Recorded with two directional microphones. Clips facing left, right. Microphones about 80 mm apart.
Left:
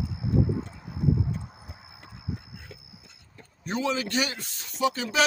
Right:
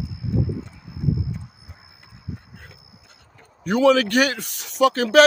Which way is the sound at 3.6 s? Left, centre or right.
Right.